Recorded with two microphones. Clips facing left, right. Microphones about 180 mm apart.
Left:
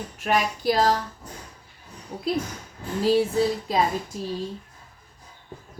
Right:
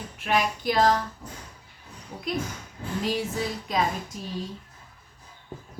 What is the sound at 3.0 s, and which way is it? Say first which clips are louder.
Speech: left 8 dB; 30° left (ahead or behind).